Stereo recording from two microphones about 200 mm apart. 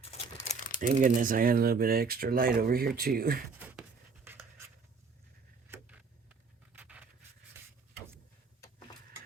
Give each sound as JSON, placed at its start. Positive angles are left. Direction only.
{"t": 0.8, "sound": "speech", "side_deg": -40}
{"t": 3.5, "sound": "a sound", "side_deg": -10}
{"t": 5.6, "sound": "vehicle", "side_deg": -10}
{"t": 6.7, "sound": "pant", "side_deg": -5}